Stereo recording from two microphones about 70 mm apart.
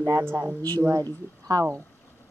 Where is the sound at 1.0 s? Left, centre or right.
Right.